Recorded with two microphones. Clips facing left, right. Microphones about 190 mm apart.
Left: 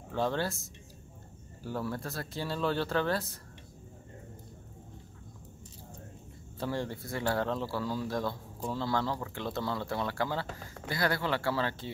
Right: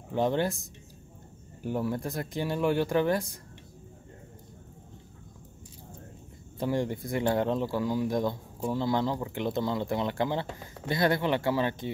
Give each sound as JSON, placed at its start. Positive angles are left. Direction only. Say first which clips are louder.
{"t": 0.1, "sound": "speech", "louder": "right 4 dB", "side_deg": -20}
{"t": 1.6, "sound": "speech", "louder": "right 5 dB", "side_deg": -15}
{"t": 6.6, "sound": "speech", "louder": "right 5 dB", "side_deg": -15}